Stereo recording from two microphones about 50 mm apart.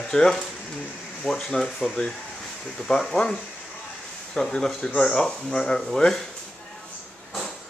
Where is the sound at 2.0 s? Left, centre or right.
Centre.